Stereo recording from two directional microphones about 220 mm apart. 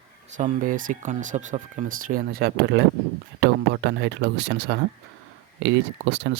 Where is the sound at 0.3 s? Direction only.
35° right (ahead or behind).